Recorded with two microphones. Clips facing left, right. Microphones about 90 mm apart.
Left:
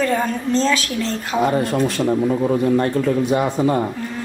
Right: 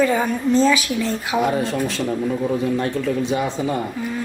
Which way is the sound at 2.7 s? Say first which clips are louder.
Left 4 dB; 45° left (ahead or behind).